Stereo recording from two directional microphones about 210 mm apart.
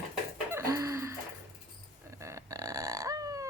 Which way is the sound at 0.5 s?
15° right (ahead or behind).